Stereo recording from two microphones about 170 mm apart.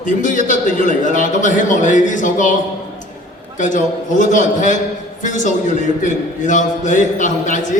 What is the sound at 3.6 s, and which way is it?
A man's voice, 50° left (ahead or behind).